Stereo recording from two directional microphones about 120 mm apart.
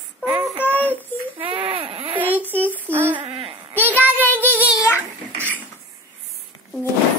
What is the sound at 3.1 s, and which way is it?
Speech, 50° right (ahead or behind).